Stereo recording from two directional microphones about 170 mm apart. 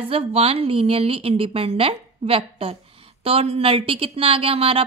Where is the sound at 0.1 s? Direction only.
35° right (ahead or behind).